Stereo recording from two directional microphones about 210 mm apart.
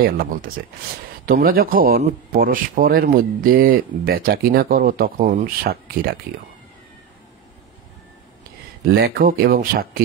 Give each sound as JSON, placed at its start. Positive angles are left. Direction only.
{"t": 0.0, "sound": "speech", "side_deg": -45}
{"t": 8.9, "sound": "speech", "side_deg": -50}